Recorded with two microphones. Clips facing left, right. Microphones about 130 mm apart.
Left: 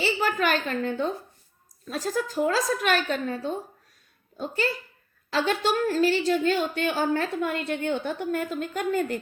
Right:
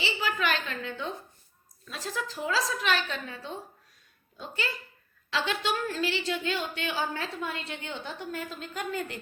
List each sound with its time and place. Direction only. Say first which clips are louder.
0.0 s speech: left 5 dB; 45° left (ahead or behind)